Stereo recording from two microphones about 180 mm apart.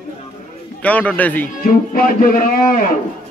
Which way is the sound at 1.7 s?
50° left (ahead or behind).